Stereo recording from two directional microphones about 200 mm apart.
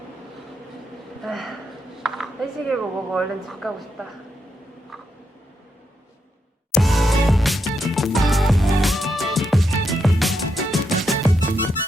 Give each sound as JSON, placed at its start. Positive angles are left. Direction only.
{"t": 1.2, "sound": "a woman's voice", "side_deg": 0}
{"t": 6.7, "sound": "music", "side_deg": 0}